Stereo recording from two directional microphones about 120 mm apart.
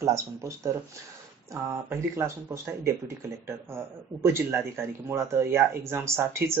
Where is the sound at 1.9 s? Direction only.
20° right (ahead or behind).